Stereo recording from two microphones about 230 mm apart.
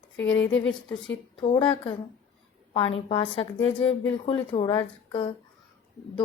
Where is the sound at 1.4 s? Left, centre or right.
Left.